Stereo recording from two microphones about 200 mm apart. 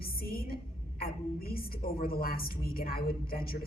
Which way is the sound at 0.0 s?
50° left (ahead or behind).